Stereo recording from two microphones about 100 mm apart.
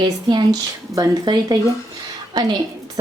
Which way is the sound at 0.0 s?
45° right (ahead or behind).